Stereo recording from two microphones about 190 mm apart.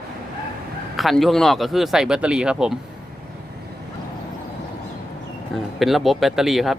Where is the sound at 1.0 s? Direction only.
Centre (ahead or behind).